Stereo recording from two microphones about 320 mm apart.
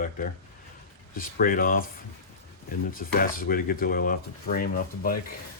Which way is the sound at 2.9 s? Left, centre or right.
Left.